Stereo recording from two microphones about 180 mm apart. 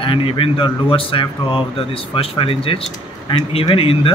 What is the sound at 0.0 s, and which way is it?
Speech, 30° left (ahead or behind).